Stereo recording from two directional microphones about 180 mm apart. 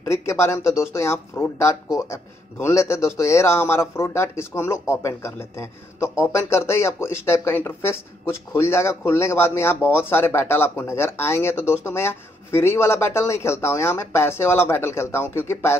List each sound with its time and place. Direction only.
0.0 s speech: 15° left (ahead or behind)